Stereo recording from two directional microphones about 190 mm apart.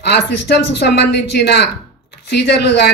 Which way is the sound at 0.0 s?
60° left (ahead or behind).